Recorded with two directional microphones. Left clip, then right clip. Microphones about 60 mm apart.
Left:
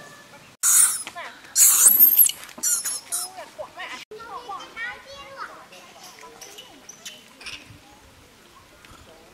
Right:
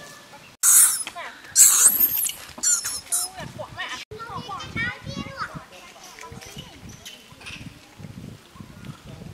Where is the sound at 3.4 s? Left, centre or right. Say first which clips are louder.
Right 2 dB; right.